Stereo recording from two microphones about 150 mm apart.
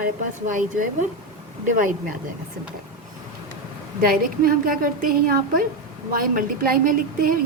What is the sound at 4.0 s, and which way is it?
A woman's voice, 75° right (ahead or behind).